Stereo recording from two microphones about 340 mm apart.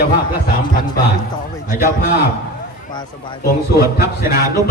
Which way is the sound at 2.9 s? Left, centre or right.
Centre.